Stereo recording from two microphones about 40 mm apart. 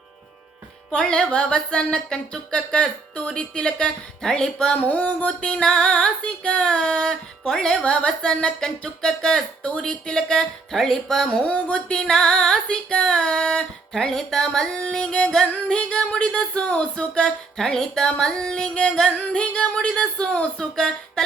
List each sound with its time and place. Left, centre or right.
0.9 s music: centre
4.2 s speech: centre
4.8 s a sound: left
5.5 s music: left
10.8 s speech: centre
11.4 s music: left
11.9 s music: centre
20.6 s speech: centre